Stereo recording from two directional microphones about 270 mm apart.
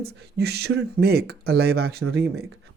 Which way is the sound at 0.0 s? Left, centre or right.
Right.